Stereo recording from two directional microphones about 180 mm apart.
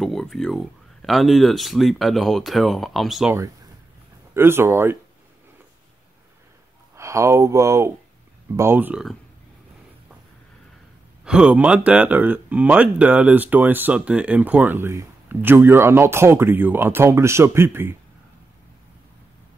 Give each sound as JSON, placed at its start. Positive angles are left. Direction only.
{"t": 0.0, "sound": "speech", "side_deg": 0}
{"t": 4.3, "sound": "speech", "side_deg": -15}
{"t": 7.0, "sound": "speech", "side_deg": -15}
{"t": 11.2, "sound": "speech", "side_deg": -5}